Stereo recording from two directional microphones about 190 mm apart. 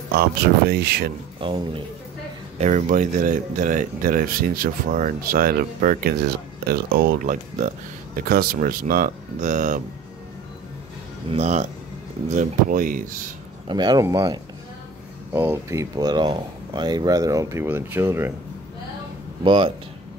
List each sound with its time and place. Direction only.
0.1 s speech: 55° right (ahead or behind)
1.4 s speech: 25° right (ahead or behind)
2.6 s speech: 40° right (ahead or behind)
11.2 s speech: 35° right (ahead or behind)
13.7 s speech: 20° right (ahead or behind)
19.4 s speech: 25° right (ahead or behind)